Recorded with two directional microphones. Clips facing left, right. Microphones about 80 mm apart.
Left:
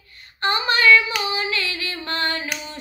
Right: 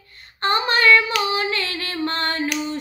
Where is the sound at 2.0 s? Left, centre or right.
Right.